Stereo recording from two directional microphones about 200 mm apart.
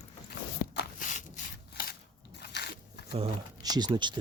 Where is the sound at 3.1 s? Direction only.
25° right (ahead or behind).